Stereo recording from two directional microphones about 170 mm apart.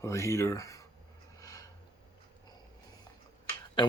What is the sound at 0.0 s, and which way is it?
Speech, 15° left (ahead or behind).